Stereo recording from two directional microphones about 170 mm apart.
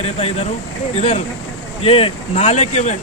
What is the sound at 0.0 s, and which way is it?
Speech, 40° left (ahead or behind).